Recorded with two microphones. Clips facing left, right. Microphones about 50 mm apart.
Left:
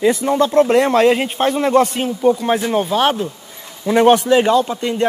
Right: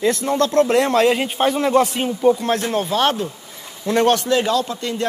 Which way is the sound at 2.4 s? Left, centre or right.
Centre.